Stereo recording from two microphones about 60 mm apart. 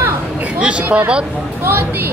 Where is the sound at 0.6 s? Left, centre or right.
Right.